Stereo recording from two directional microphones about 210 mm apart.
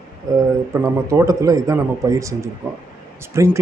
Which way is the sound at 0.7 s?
15° right (ahead or behind).